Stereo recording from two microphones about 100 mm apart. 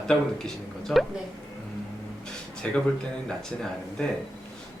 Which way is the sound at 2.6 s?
15° left (ahead or behind).